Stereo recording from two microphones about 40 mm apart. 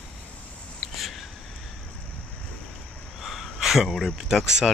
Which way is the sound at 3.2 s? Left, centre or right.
Centre.